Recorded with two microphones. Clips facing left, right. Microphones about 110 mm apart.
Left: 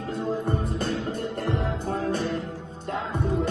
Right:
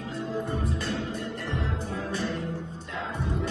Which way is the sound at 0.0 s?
45° left (ahead or behind).